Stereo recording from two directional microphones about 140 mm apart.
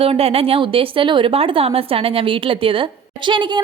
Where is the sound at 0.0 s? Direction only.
45° right (ahead or behind).